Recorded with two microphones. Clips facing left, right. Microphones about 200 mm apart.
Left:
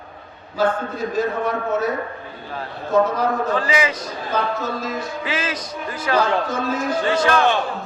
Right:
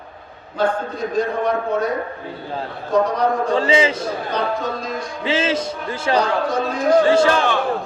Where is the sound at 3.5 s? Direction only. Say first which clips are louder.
Right 4 dB; 25° right (ahead or behind).